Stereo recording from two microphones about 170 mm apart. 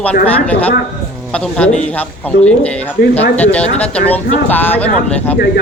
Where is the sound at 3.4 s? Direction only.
10° left (ahead or behind).